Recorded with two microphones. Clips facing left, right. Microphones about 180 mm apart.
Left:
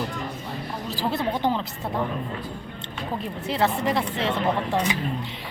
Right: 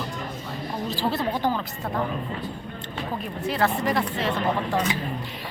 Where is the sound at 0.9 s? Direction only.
15° left (ahead or behind).